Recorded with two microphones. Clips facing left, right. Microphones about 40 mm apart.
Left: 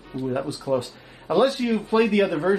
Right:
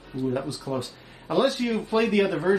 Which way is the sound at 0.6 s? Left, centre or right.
Left.